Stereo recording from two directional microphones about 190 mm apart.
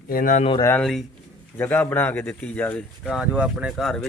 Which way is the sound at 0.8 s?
Centre (ahead or behind).